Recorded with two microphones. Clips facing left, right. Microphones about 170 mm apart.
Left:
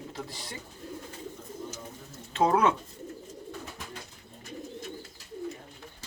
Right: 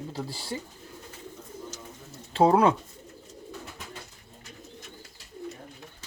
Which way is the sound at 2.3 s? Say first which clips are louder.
Right 4 dB; 30° right (ahead or behind).